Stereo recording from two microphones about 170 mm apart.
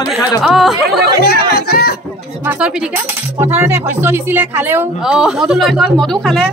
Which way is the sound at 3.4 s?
10° right (ahead or behind).